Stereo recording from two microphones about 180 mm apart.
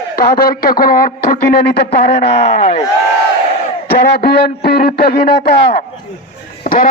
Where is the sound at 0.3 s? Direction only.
55° left (ahead or behind).